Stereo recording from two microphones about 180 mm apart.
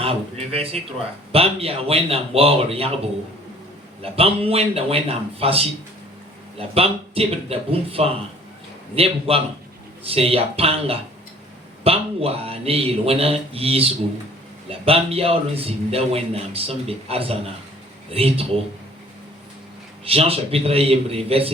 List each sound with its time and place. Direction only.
0.0 s a man's voice: 35° right (ahead or behind)
20.1 s a man's voice: 35° right (ahead or behind)